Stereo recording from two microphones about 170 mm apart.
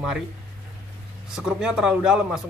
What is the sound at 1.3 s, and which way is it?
Speech, 5° right (ahead or behind).